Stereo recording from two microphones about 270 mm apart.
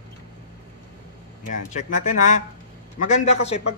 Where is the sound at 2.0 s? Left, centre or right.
Left.